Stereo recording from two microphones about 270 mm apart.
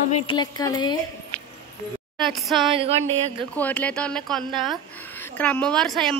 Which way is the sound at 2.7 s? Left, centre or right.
Right.